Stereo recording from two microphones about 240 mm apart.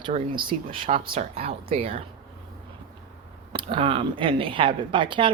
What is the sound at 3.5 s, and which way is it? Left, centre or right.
Speech, right.